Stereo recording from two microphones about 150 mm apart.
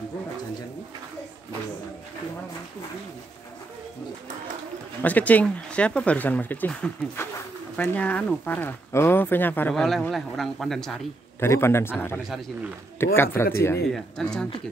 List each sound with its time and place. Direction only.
5.0 s speech: 10° left (ahead or behind)
11.3 s speech: 15° left (ahead or behind)
13.9 s speech: 5° left (ahead or behind)